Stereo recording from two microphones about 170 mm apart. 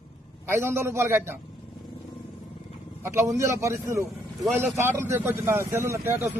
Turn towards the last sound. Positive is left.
turn(degrees=-15)  # may be behind; listen again after turning